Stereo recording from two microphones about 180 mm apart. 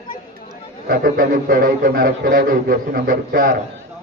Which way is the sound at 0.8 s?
55° right (ahead or behind).